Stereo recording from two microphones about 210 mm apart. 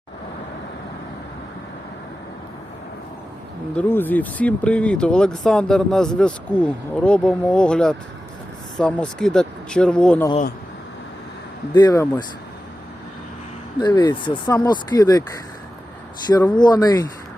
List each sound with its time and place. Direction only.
3.8 s speech: 10° left (ahead or behind)
11.7 s speech: 20° left (ahead or behind)
13.7 s speech: 20° left (ahead or behind)
16.3 s speech: 20° left (ahead or behind)